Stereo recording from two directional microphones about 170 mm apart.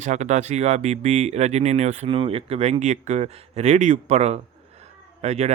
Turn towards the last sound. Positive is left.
turn(degrees=-40)  # may be behind; listen again after turning